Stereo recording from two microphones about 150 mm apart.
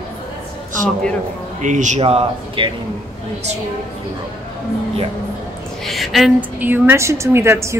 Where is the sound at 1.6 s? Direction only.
55° right (ahead or behind).